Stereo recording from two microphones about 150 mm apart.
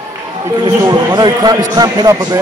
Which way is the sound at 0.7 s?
25° right (ahead or behind).